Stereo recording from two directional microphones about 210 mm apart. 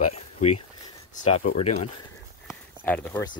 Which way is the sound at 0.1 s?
30° left (ahead or behind).